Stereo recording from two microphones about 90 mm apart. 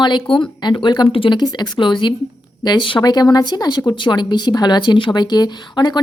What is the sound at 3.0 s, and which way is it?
Speech, 50° left (ahead or behind).